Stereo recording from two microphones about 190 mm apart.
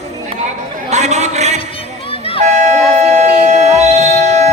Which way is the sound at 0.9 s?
35° right (ahead or behind).